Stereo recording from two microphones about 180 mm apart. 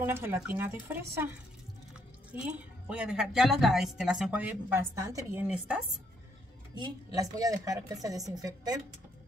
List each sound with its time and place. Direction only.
0.0 s speech: 10° right (ahead or behind)
2.3 s a woman's voice: 5° right (ahead or behind)
7.3 s speech: 20° right (ahead or behind)